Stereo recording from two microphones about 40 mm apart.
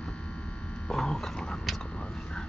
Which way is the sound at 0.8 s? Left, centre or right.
Centre.